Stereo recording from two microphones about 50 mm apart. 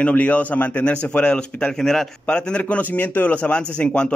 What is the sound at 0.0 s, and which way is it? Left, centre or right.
Speech, left.